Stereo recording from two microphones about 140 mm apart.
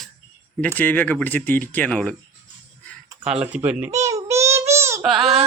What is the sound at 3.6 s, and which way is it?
Speech, 15° right (ahead or behind).